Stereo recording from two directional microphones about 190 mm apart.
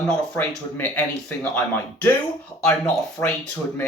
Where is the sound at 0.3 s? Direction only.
10° left (ahead or behind).